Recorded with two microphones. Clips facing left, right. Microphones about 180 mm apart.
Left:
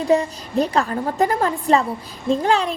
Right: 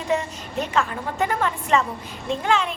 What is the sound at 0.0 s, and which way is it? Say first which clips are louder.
A woman's voice: left 6 dB; 35° left (ahead or behind).